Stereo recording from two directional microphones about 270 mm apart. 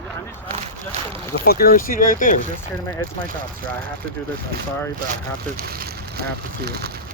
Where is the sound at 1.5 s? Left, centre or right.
Left.